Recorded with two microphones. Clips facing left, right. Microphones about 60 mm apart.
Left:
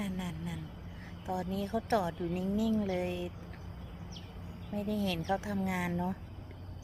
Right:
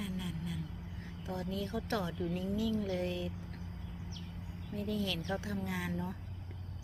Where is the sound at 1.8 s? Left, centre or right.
Centre.